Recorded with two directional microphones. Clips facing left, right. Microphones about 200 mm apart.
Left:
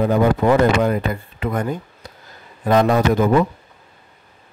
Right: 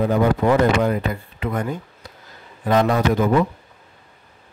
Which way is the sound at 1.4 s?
45° left (ahead or behind).